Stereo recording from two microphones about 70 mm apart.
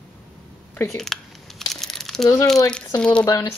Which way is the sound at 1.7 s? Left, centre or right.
Centre.